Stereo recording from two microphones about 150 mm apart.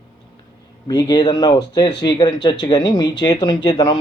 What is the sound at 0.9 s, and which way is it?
A man's voice, 30° left (ahead or behind).